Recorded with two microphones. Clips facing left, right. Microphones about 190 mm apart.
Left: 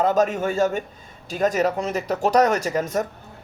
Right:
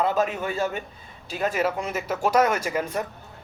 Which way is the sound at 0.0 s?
45° left (ahead or behind).